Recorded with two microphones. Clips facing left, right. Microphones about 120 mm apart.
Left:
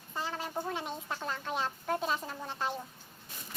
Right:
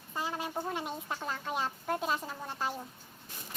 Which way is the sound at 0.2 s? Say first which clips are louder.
Right 1 dB; 10° right (ahead or behind).